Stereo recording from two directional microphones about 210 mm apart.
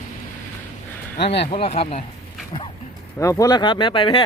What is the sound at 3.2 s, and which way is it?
Speech, 15° left (ahead or behind).